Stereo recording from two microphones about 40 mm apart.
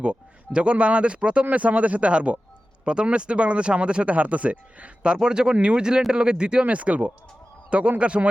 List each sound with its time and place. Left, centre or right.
0.0 s speech: right
1.5 s speech: right
5.0 s speech: centre
6.7 s speech: right